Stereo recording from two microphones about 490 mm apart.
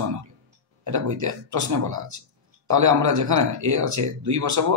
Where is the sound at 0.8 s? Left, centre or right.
Right.